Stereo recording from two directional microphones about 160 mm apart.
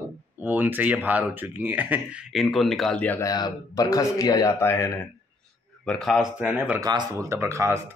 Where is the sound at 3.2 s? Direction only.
25° left (ahead or behind).